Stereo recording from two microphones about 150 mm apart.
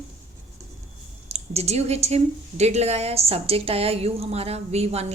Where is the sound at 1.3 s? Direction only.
45° right (ahead or behind).